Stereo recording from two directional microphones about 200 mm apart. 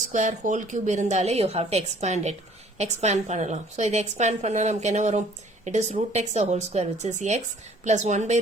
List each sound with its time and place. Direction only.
0.1 s a woman's voice: 40° right (ahead or behind)